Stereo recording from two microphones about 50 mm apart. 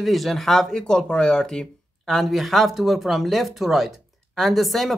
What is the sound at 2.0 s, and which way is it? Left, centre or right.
Speech, centre.